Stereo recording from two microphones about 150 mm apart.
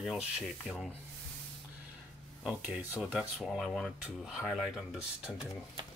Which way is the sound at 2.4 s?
5° right (ahead or behind).